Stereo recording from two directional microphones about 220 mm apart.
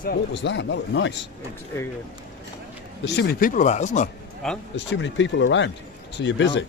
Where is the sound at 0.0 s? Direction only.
50° left (ahead or behind).